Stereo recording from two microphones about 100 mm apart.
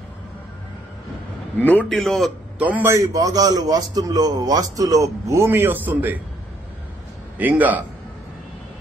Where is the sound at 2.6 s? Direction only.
15° right (ahead or behind).